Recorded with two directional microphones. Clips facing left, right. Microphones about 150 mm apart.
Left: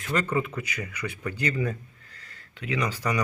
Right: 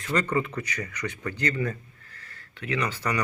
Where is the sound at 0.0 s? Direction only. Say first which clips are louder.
Right 1 dB; 5° left (ahead or behind).